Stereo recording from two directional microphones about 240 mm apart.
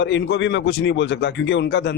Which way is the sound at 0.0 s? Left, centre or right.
Left.